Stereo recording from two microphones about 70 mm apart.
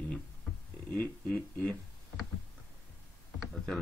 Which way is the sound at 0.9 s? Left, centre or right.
Centre.